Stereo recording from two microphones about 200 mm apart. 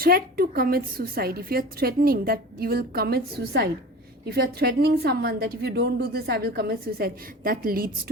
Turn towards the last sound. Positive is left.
turn(degrees=-45)  # may be behind; listen again after turning